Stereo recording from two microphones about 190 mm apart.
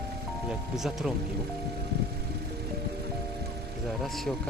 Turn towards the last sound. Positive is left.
turn(degrees=0)  # may be behind; listen again after turning